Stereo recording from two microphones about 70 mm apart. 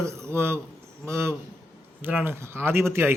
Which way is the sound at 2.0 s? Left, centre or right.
Right.